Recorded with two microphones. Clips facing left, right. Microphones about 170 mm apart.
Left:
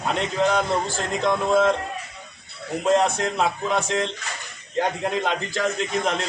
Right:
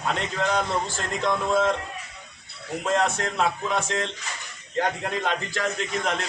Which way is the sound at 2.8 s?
15° left (ahead or behind).